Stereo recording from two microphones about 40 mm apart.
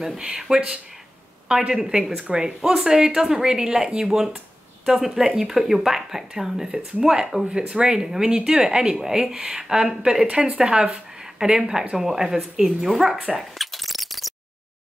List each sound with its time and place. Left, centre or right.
0.2 s speech: centre
1.7 s speech: centre
7.5 s speech: right
7.9 s speech: centre
13.4 s a sound: centre